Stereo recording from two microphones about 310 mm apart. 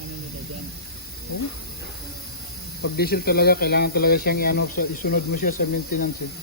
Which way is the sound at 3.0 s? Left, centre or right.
Left.